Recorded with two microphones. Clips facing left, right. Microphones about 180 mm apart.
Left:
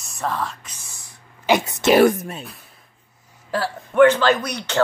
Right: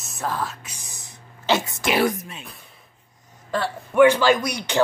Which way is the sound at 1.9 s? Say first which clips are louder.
Left 7 dB; 45° left (ahead or behind).